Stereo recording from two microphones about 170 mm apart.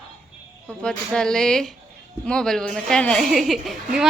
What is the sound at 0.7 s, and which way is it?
A woman's voice, 5° left (ahead or behind).